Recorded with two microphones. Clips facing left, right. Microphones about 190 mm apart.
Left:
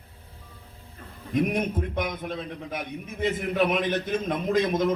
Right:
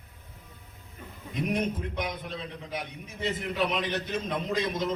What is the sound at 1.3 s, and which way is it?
A man's voice, 50° left (ahead or behind).